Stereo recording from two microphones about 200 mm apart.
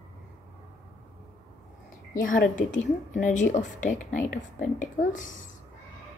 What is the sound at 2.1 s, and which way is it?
A woman's voice, 40° left (ahead or behind).